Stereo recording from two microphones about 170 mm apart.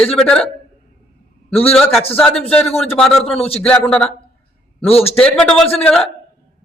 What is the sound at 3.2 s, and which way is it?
Speech, 35° left (ahead or behind).